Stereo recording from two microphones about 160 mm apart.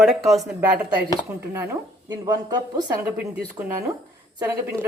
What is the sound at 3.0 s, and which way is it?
Speech, 15° right (ahead or behind).